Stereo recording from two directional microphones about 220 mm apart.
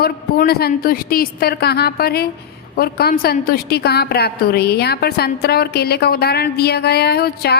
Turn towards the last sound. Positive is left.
turn(degrees=45)  # may be behind; listen again after turning